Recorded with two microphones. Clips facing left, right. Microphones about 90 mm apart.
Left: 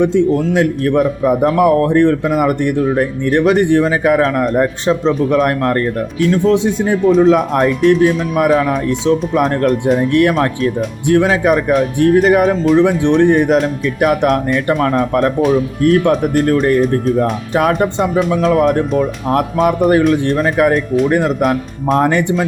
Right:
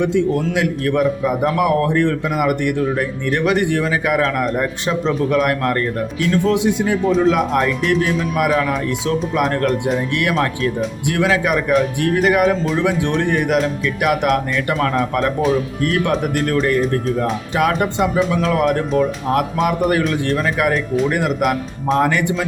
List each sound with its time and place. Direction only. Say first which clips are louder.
0.5 s a man's voice: left 5 dB; 35° left (ahead or behind)
14.7 s speech: left 4 dB; 25° left (ahead or behind)
14.9 s a man's voice: left 4 dB; 45° left (ahead or behind)